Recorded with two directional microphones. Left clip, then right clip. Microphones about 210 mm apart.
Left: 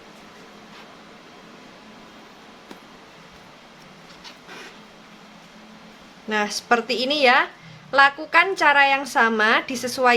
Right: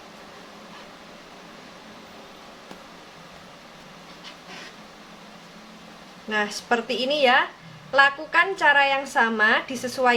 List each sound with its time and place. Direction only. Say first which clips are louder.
6.2 s a woman's voice: left 3 dB; 20° left (ahead or behind)